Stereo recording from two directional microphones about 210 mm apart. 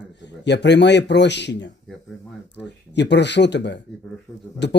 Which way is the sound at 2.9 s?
55° left (ahead or behind).